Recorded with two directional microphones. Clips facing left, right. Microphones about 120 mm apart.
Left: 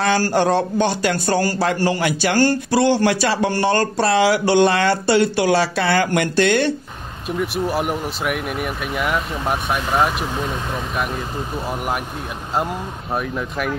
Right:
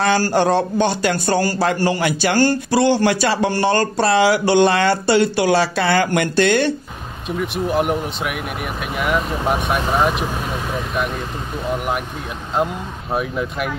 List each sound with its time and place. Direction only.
0.0 s speech: 25° right (ahead or behind)
7.2 s speech: centre (ahead or behind)
10.5 s vehicle: centre (ahead or behind)
13.1 s speech: 5° right (ahead or behind)